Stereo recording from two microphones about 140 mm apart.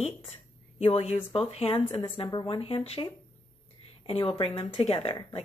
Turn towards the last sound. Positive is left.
turn(degrees=45)  # may be behind; listen again after turning